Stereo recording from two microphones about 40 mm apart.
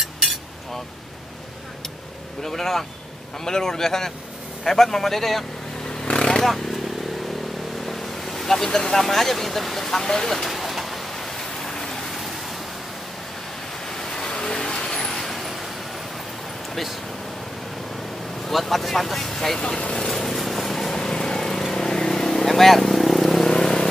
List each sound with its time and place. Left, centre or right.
0.0 s cutlery: centre
2.4 s speech: centre
6.1 s motorcycle: centre
6.4 s speech: centre
7.8 s vehicle: centre
8.6 s speech: centre
10.3 s a sound: centre
12.1 s vehicle: centre
13.8 s vehicle: centre
18.5 s speech: centre
19.8 s speech: left
20.1 s vehicle: centre
23.5 s vehicle: centre